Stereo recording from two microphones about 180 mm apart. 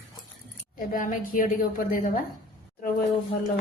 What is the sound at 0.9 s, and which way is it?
A woman's voice, 50° left (ahead or behind).